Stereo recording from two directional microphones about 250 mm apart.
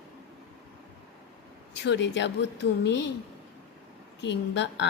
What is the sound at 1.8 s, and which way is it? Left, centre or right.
Speech, left.